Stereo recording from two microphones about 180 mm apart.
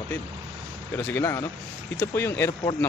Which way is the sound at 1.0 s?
10° left (ahead or behind).